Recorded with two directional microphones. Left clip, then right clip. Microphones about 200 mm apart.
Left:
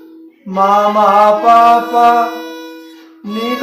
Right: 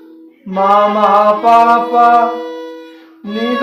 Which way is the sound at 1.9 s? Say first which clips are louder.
Right 1 dB; 25° right (ahead or behind).